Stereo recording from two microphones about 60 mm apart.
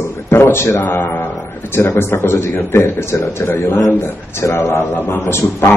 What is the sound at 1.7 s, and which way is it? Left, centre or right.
A man's voice, left.